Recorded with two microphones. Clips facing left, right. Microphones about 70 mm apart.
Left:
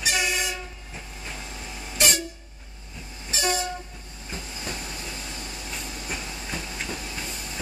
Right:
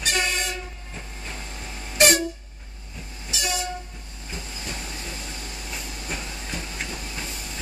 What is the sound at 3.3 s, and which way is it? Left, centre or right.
Train, left.